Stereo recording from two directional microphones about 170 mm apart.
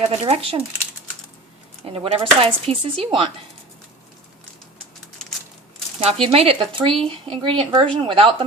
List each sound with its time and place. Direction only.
0.1 s speech: 35° right (ahead or behind)
1.8 s speech: 35° right (ahead or behind)
6.1 s speech: 35° right (ahead or behind)